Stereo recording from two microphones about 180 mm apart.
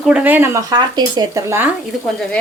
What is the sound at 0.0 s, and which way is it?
Speech, 5° right (ahead or behind).